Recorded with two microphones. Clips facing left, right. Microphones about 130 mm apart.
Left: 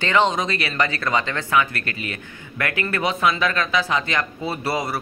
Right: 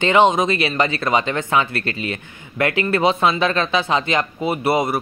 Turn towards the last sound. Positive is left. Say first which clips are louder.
# right 6 dB
turn(degrees=-20)  # may be behind; listen again after turning